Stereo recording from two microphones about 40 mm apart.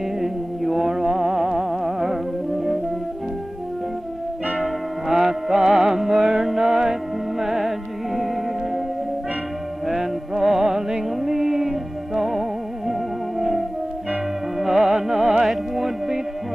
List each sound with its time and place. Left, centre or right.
0.2 s music: centre
4.6 s music: centre
9.8 s music: centre
15.4 s music: centre